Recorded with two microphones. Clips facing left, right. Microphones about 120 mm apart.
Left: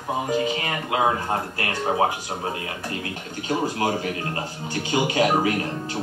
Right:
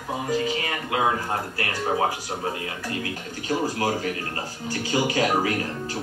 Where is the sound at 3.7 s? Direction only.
25° left (ahead or behind).